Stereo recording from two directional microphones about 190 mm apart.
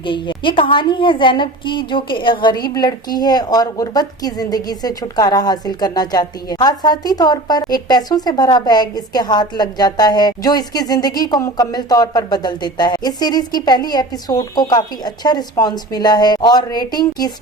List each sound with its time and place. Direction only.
0.0 s a woman's voice: 25° left (ahead or behind)